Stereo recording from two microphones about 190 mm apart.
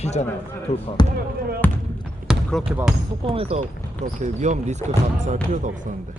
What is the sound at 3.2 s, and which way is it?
Speech, 30° right (ahead or behind).